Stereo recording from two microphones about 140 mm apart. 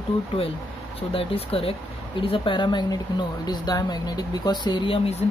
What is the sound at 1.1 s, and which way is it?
Speech, 40° left (ahead or behind).